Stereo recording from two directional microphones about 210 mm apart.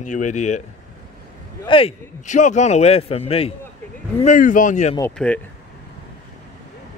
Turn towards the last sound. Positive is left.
turn(degrees=5)  # may be behind; listen again after turning